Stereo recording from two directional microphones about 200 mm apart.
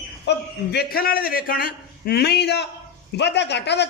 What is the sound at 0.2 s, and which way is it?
A man's voice, 55° left (ahead or behind).